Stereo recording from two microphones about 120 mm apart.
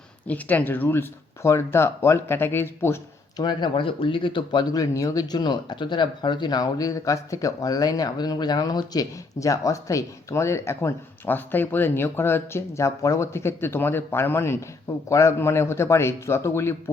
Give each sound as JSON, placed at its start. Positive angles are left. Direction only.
{"t": 0.3, "sound": "speech", "side_deg": 15}
{"t": 3.3, "sound": "speech", "side_deg": 40}